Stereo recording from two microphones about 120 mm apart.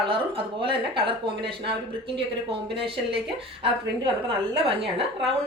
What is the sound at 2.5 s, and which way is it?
A woman's voice, 50° right (ahead or behind).